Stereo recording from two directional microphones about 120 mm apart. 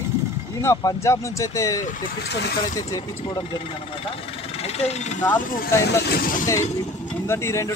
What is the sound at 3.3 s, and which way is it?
Speech, 40° left (ahead or behind).